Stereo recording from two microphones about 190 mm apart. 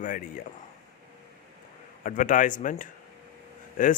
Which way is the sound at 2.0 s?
45° left (ahead or behind).